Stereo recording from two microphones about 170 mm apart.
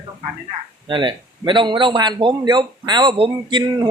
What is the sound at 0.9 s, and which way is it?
A man's voice, 30° right (ahead or behind).